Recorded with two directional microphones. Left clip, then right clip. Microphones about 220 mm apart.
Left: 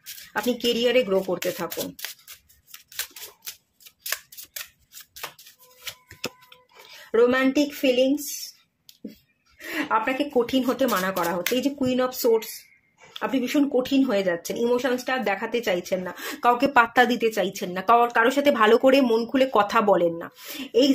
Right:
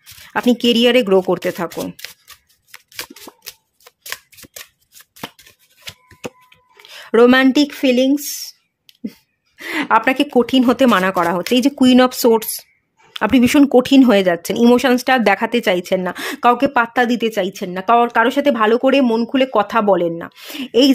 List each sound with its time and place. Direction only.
0.3 s speech: 40° right (ahead or behind)
5.9 s a sound: 5° right (ahead or behind)
7.1 s a woman's voice: 50° right (ahead or behind)
9.6 s a woman's voice: 50° right (ahead or behind)